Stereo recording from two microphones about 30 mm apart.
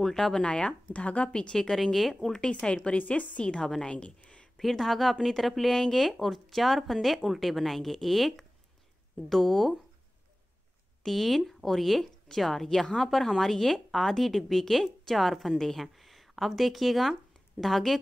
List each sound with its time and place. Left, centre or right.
0.1 s speech: centre
0.4 s a woman's voice: left
0.9 s a woman's voice: left
1.5 s a woman's voice: centre
2.6 s a woman's voice: left
3.0 s a woman's voice: left
3.4 s a woman's voice: left
4.6 s a woman's voice: centre
6.0 s a woman's voice: centre
11.1 s a woman's voice: centre